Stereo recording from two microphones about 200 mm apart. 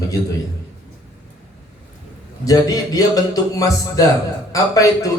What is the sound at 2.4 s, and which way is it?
Speech, 15° left (ahead or behind).